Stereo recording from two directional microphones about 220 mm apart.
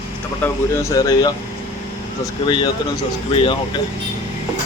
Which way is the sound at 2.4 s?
20° left (ahead or behind).